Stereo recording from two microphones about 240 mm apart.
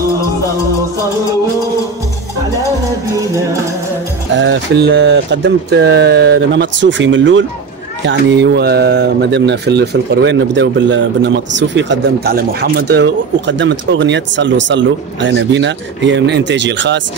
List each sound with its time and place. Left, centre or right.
4.4 s speech: right